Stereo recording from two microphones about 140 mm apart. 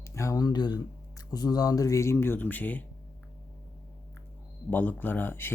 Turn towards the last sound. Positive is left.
turn(degrees=15)  # may be behind; listen again after turning